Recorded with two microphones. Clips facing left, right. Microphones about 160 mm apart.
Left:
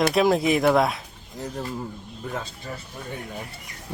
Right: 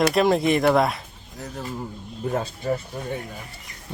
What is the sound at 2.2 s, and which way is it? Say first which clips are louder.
Speech: right 6 dB; 35° right (ahead or behind).